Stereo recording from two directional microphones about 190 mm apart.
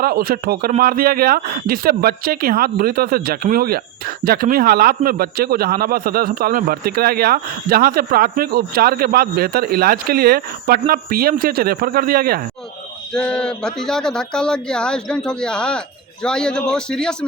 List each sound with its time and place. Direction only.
0.0 s speech: 50° right (ahead or behind)
13.1 s speech: 5° left (ahead or behind)